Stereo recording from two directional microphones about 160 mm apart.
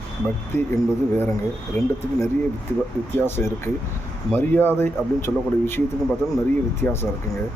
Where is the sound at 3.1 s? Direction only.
15° left (ahead or behind).